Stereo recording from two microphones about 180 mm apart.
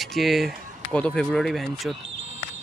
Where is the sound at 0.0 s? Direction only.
Centre (ahead or behind).